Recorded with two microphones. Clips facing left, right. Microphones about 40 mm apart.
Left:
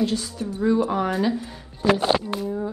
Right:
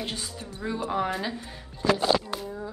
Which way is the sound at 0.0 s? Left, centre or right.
Right.